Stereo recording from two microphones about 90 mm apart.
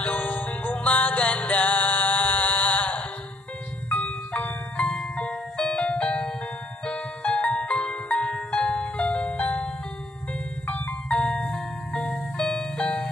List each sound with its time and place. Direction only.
0.0 s music: 20° left (ahead or behind)
10.7 s music: 15° left (ahead or behind)